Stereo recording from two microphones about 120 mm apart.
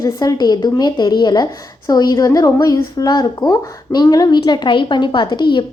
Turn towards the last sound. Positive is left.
turn(degrees=40)  # may be behind; listen again after turning